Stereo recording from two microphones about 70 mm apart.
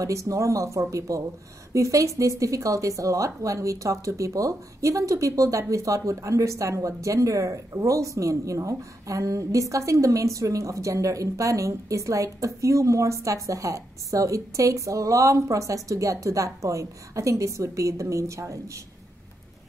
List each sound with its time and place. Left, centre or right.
0.0 s speech: right